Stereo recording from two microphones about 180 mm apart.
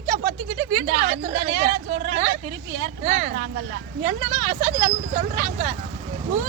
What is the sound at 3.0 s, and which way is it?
Speech, 35° right (ahead or behind).